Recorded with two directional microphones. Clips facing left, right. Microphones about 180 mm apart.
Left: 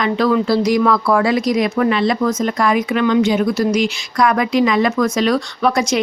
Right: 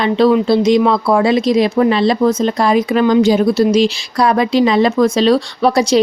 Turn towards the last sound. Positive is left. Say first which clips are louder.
# right 4 dB
turn(degrees=-35)  # may be behind; listen again after turning